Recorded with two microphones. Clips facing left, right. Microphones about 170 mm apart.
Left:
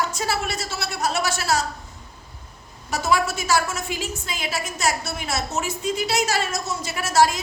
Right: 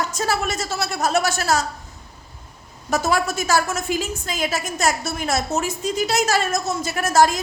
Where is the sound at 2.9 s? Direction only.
45° right (ahead or behind).